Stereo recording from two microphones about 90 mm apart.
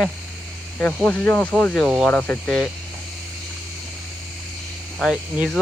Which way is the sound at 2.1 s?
15° left (ahead or behind).